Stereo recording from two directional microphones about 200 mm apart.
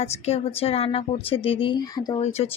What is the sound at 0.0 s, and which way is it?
Speech, 30° left (ahead or behind).